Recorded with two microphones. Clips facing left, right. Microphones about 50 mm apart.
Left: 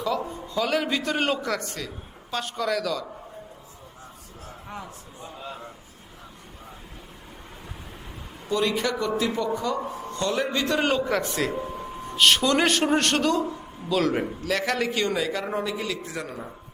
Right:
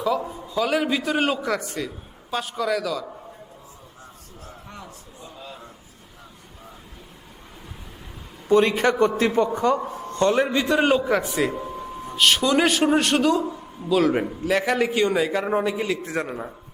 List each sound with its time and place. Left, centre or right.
0.0 s a man's voice: centre
8.4 s a man's voice: right; by 11.5 s centre
12.1 s a man's voice: centre; by 16.5 s right